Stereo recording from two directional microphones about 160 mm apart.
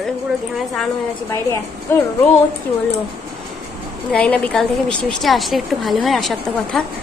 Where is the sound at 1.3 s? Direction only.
15° left (ahead or behind).